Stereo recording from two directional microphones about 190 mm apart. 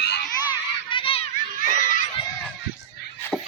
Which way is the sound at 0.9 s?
30° left (ahead or behind).